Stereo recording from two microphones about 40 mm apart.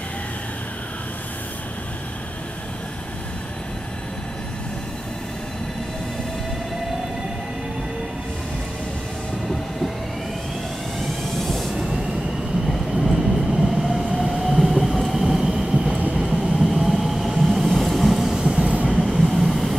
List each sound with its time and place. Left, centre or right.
11.0 s vehicle: centre
11.7 s train: centre
13.0 s train: centre
16.5 s vehicle: centre
18.3 s train: centre
18.7 s train: right
19.0 s train: centre